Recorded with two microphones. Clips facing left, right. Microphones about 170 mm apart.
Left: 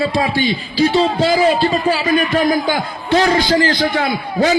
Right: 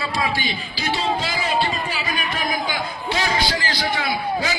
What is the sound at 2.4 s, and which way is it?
A man's voice, 55° left (ahead or behind).